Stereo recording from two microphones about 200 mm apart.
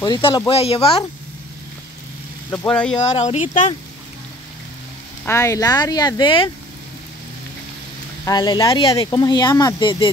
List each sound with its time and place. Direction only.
0.0 s speech: 20° left (ahead or behind)
2.5 s speech: 10° left (ahead or behind)
3.0 s speech: 35° left (ahead or behind)
5.2 s speech: 15° left (ahead or behind)
8.3 s speech: 20° left (ahead or behind)